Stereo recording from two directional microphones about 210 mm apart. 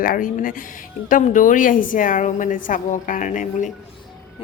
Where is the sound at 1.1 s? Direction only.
40° left (ahead or behind).